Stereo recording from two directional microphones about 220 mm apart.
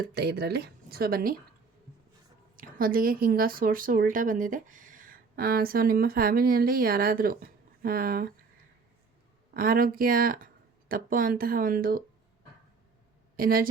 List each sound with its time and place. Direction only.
0.1 s speech: 45° right (ahead or behind)
2.6 s speech: 40° right (ahead or behind)
9.6 s speech: 40° right (ahead or behind)
13.3 s a woman's voice: 40° right (ahead or behind)